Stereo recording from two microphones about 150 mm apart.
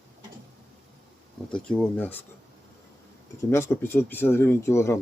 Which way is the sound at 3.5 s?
15° left (ahead or behind).